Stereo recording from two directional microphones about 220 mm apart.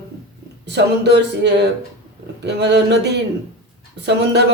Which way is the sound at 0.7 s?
50° right (ahead or behind).